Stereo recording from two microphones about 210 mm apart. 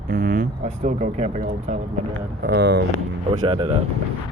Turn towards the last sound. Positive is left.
turn(degrees=-25)  # may be behind; listen again after turning